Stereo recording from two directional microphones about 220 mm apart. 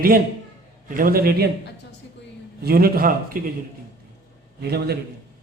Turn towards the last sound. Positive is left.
turn(degrees=-45)  # may be behind; listen again after turning